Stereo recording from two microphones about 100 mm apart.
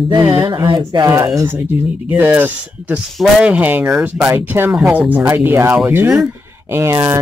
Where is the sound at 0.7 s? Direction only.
50° right (ahead or behind).